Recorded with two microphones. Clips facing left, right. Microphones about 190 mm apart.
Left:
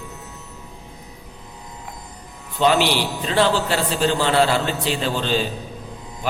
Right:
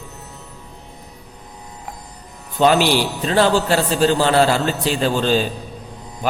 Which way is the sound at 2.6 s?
45° right (ahead or behind).